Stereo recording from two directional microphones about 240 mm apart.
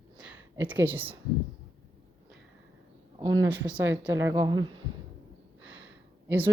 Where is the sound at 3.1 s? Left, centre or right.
Centre.